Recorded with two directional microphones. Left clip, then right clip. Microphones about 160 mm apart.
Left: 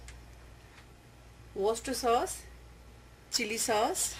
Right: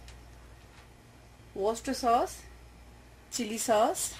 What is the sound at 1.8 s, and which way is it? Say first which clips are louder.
Speech: right 4 dB; 40° right (ahead or behind).